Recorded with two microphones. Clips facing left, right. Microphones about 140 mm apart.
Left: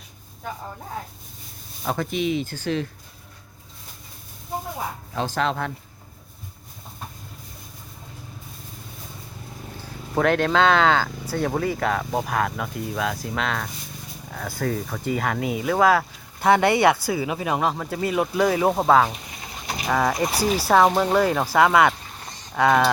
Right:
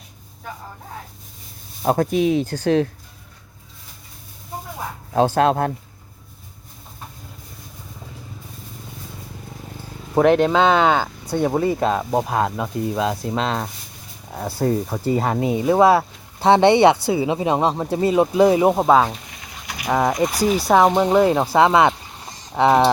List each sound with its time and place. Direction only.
1.8 s speech: 45° right (ahead or behind)
2.6 s speech: 65° right (ahead or behind)
5.1 s speech: 55° right (ahead or behind)
10.2 s speech: 20° right (ahead or behind)